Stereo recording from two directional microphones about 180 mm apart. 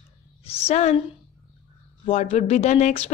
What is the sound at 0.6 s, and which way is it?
Speech, 40° left (ahead or behind).